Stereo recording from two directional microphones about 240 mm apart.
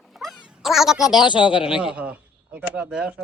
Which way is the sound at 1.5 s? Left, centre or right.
Centre.